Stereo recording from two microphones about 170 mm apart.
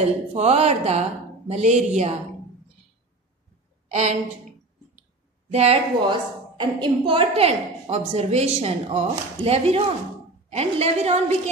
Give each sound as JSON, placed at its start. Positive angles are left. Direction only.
{"t": 0.0, "sound": "a woman's voice", "side_deg": -40}
{"t": 5.5, "sound": "a woman's voice", "side_deg": -35}